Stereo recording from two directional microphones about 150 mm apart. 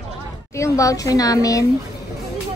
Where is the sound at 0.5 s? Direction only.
20° left (ahead or behind).